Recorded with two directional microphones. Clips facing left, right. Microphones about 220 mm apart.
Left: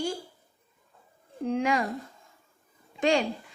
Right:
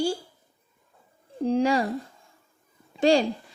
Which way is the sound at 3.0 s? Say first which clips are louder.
Right 4 dB; 35° right (ahead or behind).